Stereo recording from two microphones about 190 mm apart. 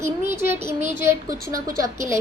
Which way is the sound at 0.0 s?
15° right (ahead or behind).